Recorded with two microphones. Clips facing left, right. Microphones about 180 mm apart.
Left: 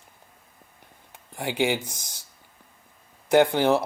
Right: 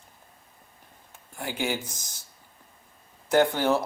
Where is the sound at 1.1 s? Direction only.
20° left (ahead or behind).